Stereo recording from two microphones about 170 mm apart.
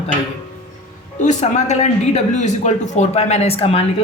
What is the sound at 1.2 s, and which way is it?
Speech, 45° left (ahead or behind).